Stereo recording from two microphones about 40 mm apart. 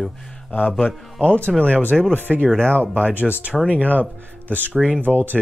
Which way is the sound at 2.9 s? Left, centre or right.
Right.